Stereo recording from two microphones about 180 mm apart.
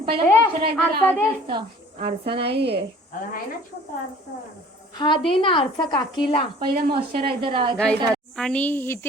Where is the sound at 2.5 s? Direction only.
65° right (ahead or behind).